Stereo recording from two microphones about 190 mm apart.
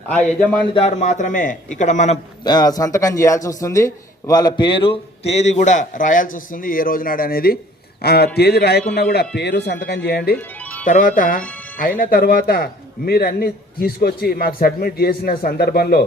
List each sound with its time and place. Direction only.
0.1 s a man's voice: 5° left (ahead or behind)
0.7 s speech: 30° left (ahead or behind)
2.4 s speech: 20° left (ahead or behind); by 10.3 s 60° left (ahead or behind)
10.6 s music: 10° left (ahead or behind)
10.8 s a man's voice: 45° left (ahead or behind)